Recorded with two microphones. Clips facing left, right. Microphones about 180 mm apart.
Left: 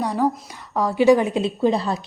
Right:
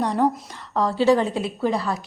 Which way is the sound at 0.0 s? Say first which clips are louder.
Even; 5° left (ahead or behind).